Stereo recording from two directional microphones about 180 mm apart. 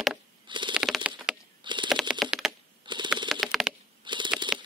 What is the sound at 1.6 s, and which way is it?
Typing, 25° right (ahead or behind).